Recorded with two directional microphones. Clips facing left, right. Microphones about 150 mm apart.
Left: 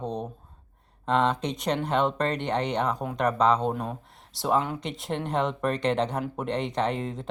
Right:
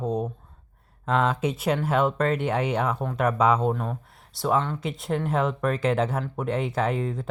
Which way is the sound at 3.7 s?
15° left (ahead or behind).